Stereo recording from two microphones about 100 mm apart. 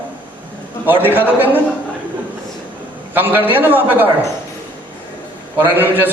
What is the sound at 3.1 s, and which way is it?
Speech, 20° right (ahead or behind).